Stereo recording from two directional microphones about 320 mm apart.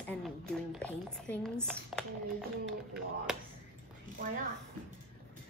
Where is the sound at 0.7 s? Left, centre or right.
Centre.